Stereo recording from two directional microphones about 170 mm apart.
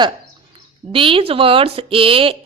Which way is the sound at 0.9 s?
30° right (ahead or behind).